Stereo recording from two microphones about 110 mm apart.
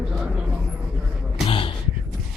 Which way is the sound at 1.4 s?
55° left (ahead or behind).